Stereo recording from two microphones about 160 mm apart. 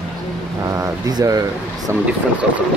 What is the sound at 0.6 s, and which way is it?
Speech, 20° right (ahead or behind).